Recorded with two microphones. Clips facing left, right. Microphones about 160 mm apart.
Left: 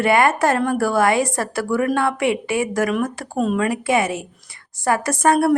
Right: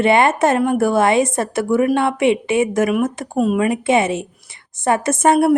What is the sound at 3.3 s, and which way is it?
Speech, 10° right (ahead or behind).